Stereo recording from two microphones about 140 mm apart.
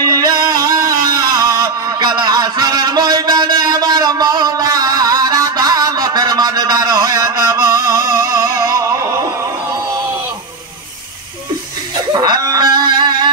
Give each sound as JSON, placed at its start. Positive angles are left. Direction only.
{"t": 0.0, "sound": "music", "side_deg": -25}
{"t": 12.1, "sound": "wail", "side_deg": -30}